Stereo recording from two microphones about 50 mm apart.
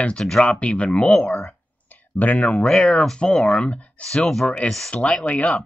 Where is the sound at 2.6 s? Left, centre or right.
Centre.